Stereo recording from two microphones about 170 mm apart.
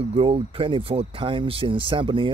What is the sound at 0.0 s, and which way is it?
Speech, 35° right (ahead or behind).